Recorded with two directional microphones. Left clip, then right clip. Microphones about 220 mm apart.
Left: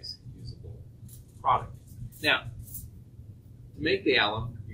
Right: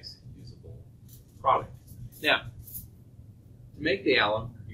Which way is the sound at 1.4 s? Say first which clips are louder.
Right 1 dB; 20° left (ahead or behind).